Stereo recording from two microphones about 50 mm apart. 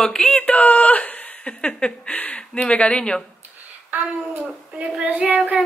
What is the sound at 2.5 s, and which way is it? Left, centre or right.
Speech, left.